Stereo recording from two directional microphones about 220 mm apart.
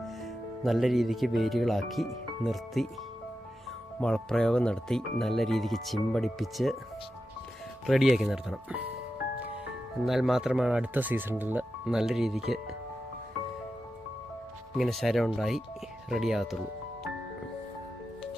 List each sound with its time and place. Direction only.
0.6 s speech: centre (ahead or behind)
4.0 s speech: 5° left (ahead or behind)
7.9 s speech: centre (ahead or behind)
10.1 s speech: centre (ahead or behind)
14.8 s speech: centre (ahead or behind)